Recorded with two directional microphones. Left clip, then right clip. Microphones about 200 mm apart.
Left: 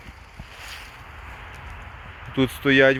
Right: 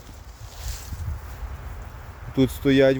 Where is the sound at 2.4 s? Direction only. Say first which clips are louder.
Left 1 dB; 10° right (ahead or behind).